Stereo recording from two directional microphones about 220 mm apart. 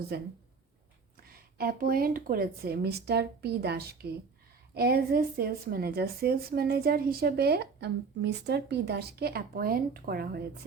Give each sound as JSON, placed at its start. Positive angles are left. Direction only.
{"t": 0.1, "sound": "speech", "side_deg": -45}
{"t": 1.3, "sound": "speech", "side_deg": -45}